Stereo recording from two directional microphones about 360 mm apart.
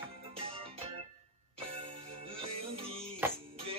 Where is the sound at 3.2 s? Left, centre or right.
Centre.